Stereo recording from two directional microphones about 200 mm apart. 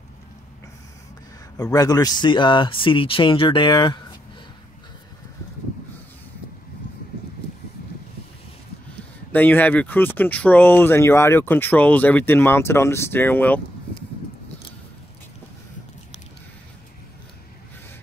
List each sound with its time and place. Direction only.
1.6 s speech: 20° left (ahead or behind)
9.3 s speech: 10° left (ahead or behind)